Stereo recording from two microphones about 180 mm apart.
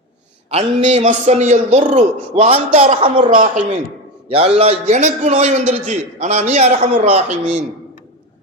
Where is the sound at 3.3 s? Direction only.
45° right (ahead or behind).